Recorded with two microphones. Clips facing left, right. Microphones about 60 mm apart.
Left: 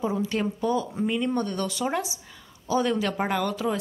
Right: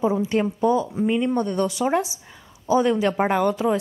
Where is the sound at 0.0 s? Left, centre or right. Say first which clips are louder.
Right 5 dB; centre.